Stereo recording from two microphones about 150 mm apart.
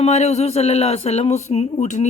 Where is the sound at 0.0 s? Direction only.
45° left (ahead or behind).